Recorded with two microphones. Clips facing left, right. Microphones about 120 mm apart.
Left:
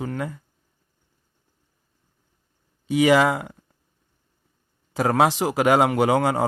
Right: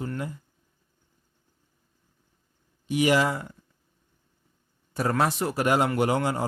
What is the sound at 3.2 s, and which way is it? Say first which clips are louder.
Speech: left 6 dB; 90° left.